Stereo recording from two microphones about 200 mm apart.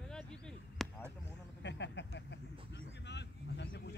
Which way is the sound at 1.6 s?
60° left (ahead or behind).